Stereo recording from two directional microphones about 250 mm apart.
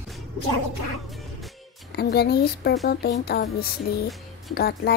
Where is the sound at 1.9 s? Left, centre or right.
Left.